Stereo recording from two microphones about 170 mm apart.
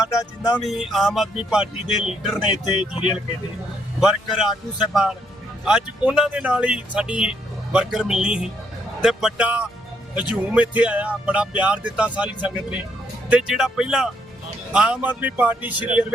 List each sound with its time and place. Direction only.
0.1 s music: 20° left (ahead or behind)
0.7 s speech: centre (ahead or behind)
5.6 s speech: 5° right (ahead or behind)